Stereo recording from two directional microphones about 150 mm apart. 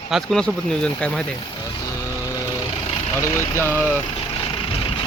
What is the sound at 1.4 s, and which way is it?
Speech, 30° left (ahead or behind).